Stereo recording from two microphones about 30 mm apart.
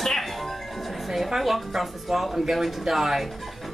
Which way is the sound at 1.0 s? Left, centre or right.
Centre.